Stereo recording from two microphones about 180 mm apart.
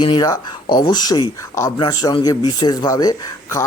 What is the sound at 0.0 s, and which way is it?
Speech, 25° left (ahead or behind).